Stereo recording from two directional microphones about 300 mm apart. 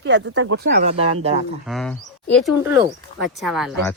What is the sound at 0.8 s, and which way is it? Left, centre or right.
Speech, centre.